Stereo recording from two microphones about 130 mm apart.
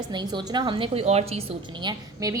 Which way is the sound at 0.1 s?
35° right (ahead or behind).